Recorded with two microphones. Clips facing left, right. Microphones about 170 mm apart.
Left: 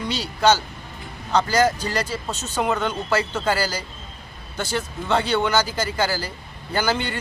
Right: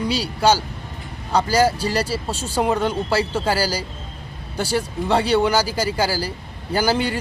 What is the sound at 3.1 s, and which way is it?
Speech, 35° right (ahead or behind).